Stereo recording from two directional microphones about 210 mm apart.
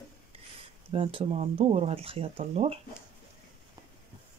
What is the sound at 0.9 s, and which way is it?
Speech, 25° right (ahead or behind).